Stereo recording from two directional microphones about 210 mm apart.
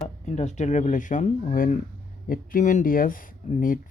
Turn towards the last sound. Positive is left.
turn(degrees=40)  # may be behind; listen again after turning